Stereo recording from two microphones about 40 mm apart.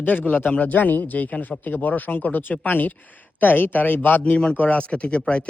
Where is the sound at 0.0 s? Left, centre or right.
Left.